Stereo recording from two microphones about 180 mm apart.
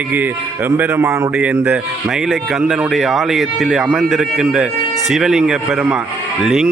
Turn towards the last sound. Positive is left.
turn(degrees=0)  # may be behind; listen again after turning